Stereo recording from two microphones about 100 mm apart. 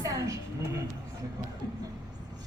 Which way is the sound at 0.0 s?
35° right (ahead or behind).